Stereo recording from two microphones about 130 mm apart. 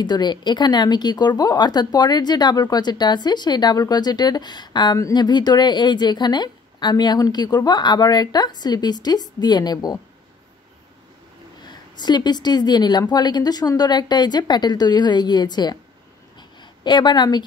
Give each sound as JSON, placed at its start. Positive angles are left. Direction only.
{"t": 0.0, "sound": "a woman's voice", "side_deg": 35}
{"t": 11.6, "sound": "a woman's voice", "side_deg": 35}
{"t": 16.3, "sound": "a sound", "side_deg": 35}